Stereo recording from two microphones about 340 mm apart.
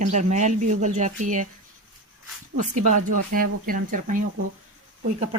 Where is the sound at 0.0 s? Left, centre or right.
Right.